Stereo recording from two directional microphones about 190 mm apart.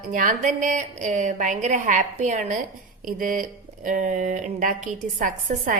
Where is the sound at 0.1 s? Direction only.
45° right (ahead or behind).